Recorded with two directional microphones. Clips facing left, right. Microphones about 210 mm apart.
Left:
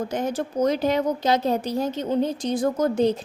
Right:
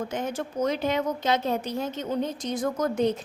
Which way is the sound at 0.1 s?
35° left (ahead or behind).